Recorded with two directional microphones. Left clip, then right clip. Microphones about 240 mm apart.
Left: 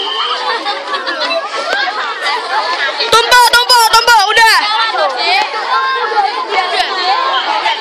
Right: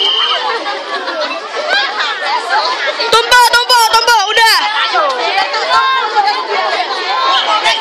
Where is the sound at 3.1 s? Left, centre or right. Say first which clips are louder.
Even; centre.